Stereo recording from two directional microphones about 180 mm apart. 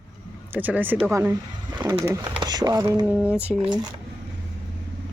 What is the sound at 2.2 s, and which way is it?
Speech, 25° right (ahead or behind).